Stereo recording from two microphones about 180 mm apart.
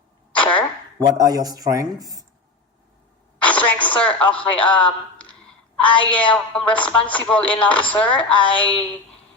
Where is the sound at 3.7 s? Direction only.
10° left (ahead or behind).